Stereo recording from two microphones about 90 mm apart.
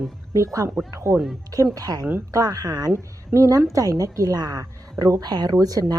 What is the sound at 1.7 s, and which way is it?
A woman's voice, 40° right (ahead or behind).